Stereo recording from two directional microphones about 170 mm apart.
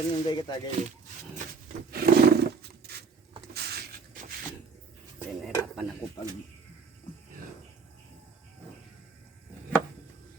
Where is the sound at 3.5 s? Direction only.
70° right (ahead or behind).